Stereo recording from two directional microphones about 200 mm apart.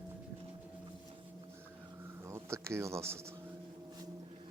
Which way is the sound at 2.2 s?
15° right (ahead or behind).